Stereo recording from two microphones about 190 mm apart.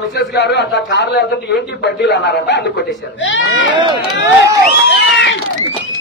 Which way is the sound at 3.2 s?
90° left.